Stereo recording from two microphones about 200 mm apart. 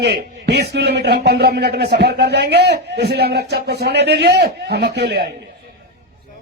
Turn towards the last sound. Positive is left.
turn(degrees=-55)  # may be behind; listen again after turning